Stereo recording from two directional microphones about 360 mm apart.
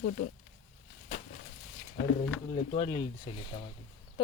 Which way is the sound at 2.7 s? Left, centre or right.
Centre.